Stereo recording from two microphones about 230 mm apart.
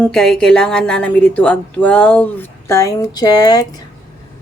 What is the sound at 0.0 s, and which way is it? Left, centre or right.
A woman's voice, centre.